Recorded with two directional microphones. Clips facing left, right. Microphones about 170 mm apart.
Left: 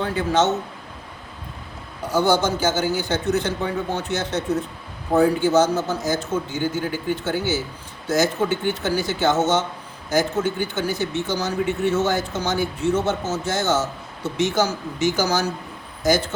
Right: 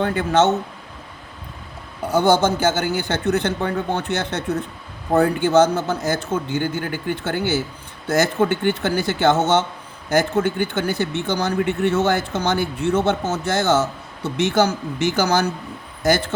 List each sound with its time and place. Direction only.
0.0 s speech: 55° right (ahead or behind)
2.0 s speech: 55° right (ahead or behind)